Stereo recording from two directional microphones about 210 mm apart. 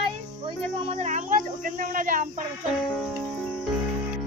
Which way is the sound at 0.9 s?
35° right (ahead or behind).